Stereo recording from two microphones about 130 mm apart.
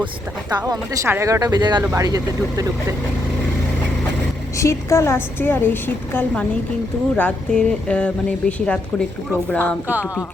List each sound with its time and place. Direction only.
0.6 s speech: 20° right (ahead or behind)
1.8 s speech: 20° right (ahead or behind)
4.5 s a woman's voice: 25° left (ahead or behind)